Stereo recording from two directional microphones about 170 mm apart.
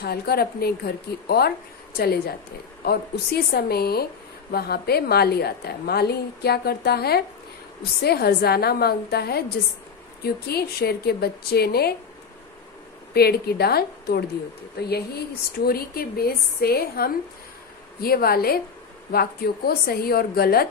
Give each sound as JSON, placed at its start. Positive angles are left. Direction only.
{"t": 0.0, "sound": "speech", "side_deg": 65}
{"t": 13.1, "sound": "speech", "side_deg": 65}